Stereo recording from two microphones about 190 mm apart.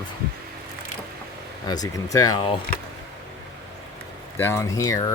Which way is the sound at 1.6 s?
20° left (ahead or behind).